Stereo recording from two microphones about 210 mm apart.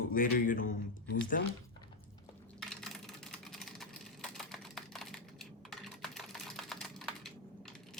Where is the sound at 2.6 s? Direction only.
Centre (ahead or behind).